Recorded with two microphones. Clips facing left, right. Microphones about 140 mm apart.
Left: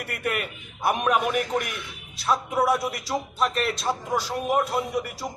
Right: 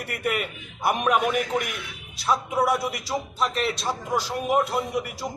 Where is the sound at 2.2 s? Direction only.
Centre (ahead or behind).